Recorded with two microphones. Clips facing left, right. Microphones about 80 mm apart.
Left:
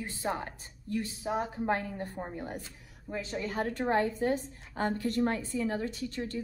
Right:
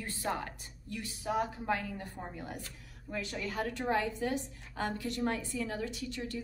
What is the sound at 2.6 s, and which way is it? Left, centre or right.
A woman's voice, centre.